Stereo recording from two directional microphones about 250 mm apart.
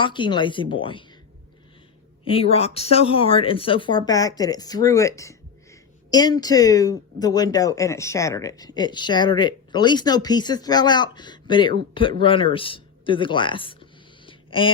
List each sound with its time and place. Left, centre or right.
0.0 s speech: centre
2.2 s speech: left
14.3 s a sound: centre